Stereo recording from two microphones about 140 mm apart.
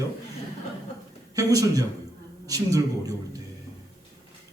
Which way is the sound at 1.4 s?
25° right (ahead or behind).